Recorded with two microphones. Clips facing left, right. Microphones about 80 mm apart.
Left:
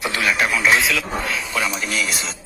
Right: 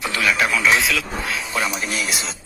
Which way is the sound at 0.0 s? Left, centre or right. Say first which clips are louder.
Even; centre.